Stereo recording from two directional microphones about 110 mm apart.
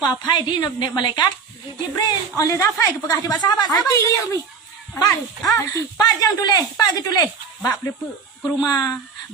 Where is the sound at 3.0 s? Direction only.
40° left (ahead or behind).